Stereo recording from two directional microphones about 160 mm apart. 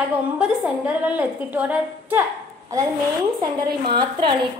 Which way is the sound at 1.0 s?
10° right (ahead or behind).